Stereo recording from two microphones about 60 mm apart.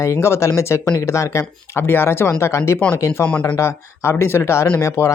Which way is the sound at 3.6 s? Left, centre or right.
Left.